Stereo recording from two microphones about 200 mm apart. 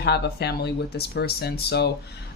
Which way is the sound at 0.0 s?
55° left (ahead or behind).